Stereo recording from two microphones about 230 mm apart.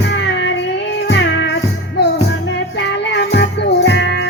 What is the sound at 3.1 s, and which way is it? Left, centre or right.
Music, left.